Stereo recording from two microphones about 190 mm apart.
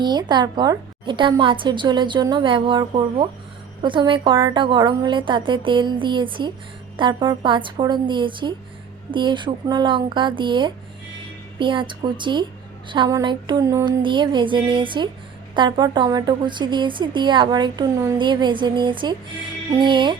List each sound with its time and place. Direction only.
0.0 s a woman's voice: 20° right (ahead or behind)